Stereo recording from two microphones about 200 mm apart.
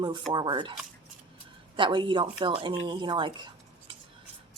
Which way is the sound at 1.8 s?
25° right (ahead or behind).